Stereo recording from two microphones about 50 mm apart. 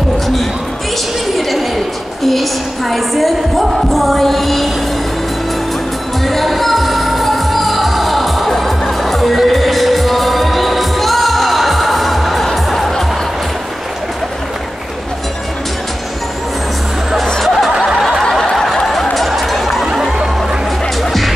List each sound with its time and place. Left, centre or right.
2.2 s music: centre
6.2 s music: centre
17.4 s music: centre
18.3 s snicker: centre
19.1 s a sound: centre
21.0 s music: centre